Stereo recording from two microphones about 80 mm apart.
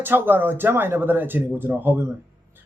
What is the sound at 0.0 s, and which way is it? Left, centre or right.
Speech, right.